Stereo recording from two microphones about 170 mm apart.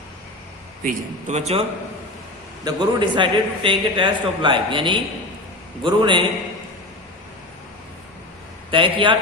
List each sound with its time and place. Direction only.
0.9 s speech: 40° right (ahead or behind)
2.6 s a man's voice: 30° right (ahead or behind)
8.7 s speech: 30° right (ahead or behind)